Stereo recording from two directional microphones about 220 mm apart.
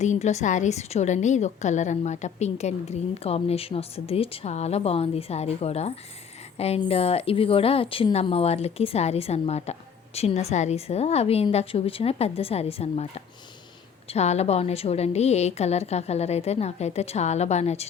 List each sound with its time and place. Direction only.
0.0 s a woman's voice: 30° left (ahead or behind)